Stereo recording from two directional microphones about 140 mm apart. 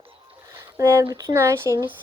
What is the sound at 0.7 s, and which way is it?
Speech, 20° right (ahead or behind).